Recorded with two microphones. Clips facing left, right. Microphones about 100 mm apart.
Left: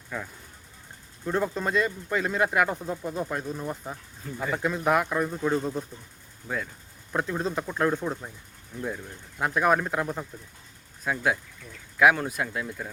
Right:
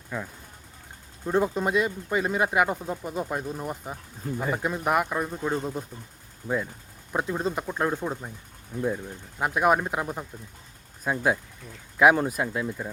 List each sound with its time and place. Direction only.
0.1 s speech: 10° right (ahead or behind)
7.1 s speech: 5° right (ahead or behind)
11.0 s speech: 25° right (ahead or behind)